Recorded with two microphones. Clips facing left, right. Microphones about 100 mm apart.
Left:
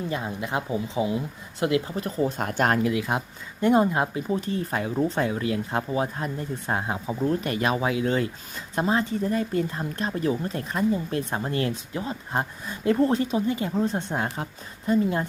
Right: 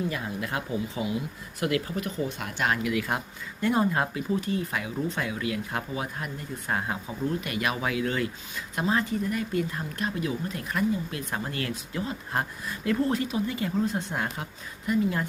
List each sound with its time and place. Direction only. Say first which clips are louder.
0.1 s speech: left 3 dB; 25° left (ahead or behind)
2.0 s speech: left 5 dB; 40° left (ahead or behind)
2.9 s speech: left 2 dB; 25° left (ahead or behind)